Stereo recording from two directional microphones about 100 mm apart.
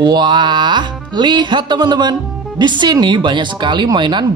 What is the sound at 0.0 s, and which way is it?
Speech, 50° right (ahead or behind).